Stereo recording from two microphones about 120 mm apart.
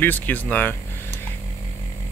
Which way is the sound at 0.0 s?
15° left (ahead or behind).